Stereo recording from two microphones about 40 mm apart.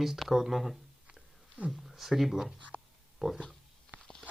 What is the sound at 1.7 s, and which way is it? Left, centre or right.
Speech, centre.